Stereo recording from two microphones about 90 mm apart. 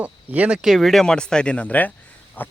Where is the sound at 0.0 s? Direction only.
15° right (ahead or behind).